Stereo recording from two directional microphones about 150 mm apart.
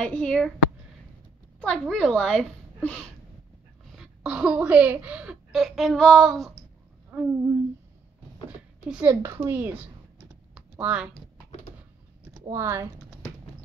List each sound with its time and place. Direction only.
0.0 s a child's voice: 5° left (ahead or behind)
1.6 s a child's voice: 5° left (ahead or behind)
3.9 s a woman's voice: 5° right (ahead or behind)
8.5 s a sound: 10° right (ahead or behind)
9.2 s speech: 20° right (ahead or behind)
10.5 s typing: 5° right (ahead or behind)
12.4 s speech: 20° right (ahead or behind)